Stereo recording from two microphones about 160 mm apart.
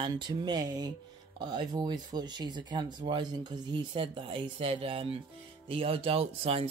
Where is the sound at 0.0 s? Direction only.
25° right (ahead or behind).